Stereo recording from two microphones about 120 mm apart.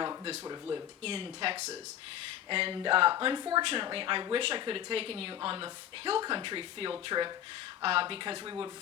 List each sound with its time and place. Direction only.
1.0 s speech: 45° right (ahead or behind)